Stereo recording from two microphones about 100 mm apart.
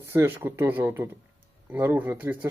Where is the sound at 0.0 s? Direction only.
25° right (ahead or behind).